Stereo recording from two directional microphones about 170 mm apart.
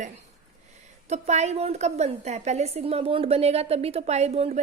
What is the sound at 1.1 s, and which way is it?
A woman's voice, 40° right (ahead or behind).